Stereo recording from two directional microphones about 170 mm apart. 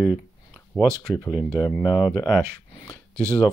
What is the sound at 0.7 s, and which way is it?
Speech, 10° right (ahead or behind).